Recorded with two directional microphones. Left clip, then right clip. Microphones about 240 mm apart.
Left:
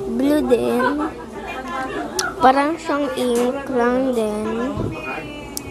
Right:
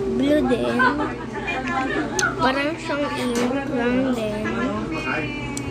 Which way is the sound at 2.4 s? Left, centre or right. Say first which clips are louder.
Left 6 dB; left.